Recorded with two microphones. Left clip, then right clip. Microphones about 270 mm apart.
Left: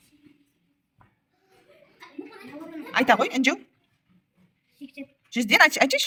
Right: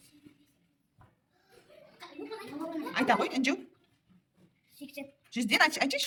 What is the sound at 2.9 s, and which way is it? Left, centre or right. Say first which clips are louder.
Speech: left 8 dB; centre.